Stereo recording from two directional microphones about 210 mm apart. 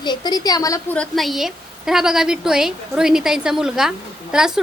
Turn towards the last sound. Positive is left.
turn(degrees=-5)  # may be behind; listen again after turning